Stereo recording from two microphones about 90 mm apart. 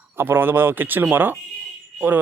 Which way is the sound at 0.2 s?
25° right (ahead or behind).